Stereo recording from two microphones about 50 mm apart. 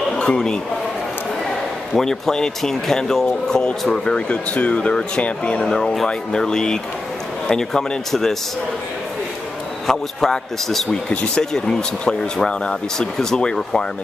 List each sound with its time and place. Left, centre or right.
0.1 s chatter: centre
2.0 s speech: centre
4.3 s speech: left
5.7 s speech: centre
9.8 s speech: centre